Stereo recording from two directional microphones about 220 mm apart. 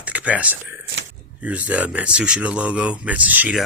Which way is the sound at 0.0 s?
5° right (ahead or behind).